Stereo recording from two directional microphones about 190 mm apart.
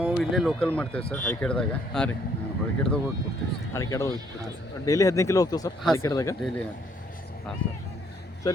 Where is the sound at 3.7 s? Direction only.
15° left (ahead or behind).